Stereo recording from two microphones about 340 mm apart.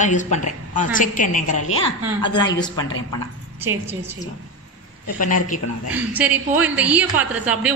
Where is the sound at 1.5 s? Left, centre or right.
Left.